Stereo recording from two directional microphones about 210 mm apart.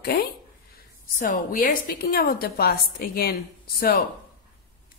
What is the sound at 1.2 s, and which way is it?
Speech, 40° left (ahead or behind).